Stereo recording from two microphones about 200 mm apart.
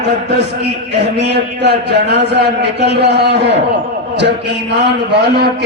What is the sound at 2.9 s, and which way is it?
Speech, 55° right (ahead or behind).